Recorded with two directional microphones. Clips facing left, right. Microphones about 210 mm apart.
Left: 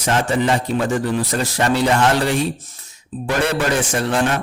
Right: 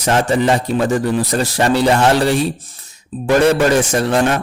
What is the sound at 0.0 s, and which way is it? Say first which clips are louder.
Speech: right 3 dB; 40° right (ahead or behind).